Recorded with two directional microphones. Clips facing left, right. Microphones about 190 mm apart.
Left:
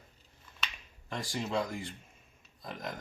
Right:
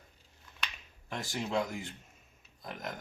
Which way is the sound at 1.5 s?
Centre (ahead or behind).